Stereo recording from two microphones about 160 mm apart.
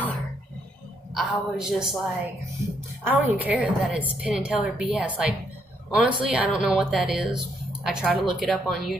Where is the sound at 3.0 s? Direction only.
10° right (ahead or behind).